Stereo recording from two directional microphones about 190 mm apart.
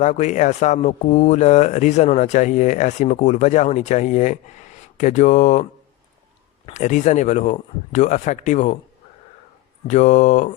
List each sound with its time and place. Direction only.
0.0 s speech: 40° left (ahead or behind)
6.7 s speech: 40° left (ahead or behind)
9.8 s speech: 35° left (ahead or behind)